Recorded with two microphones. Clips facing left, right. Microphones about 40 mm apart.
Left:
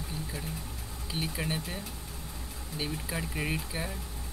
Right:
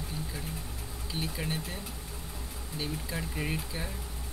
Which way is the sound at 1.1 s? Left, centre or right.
Centre.